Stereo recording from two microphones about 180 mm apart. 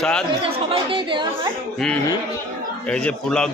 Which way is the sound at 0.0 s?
5° left (ahead or behind).